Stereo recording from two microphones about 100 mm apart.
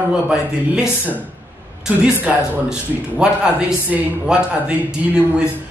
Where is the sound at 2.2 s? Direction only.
10° right (ahead or behind).